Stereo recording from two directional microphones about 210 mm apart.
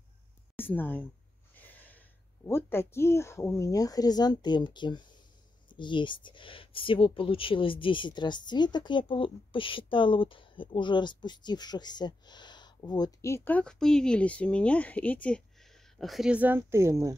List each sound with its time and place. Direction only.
0.6 s speech: 10° left (ahead or behind); by 17.1 s 15° right (ahead or behind)